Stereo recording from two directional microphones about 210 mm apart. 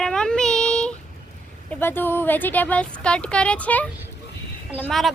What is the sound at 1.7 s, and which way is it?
Speech, 10° left (ahead or behind).